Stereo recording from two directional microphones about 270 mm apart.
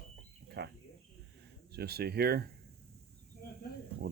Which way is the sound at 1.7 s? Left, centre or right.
Right.